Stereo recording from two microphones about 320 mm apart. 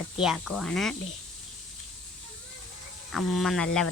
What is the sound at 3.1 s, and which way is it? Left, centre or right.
Speech, centre.